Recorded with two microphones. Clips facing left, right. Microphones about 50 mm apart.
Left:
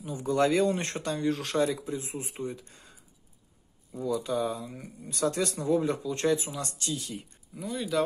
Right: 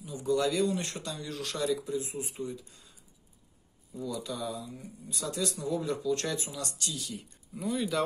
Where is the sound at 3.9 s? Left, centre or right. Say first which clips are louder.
Left 7 dB; left.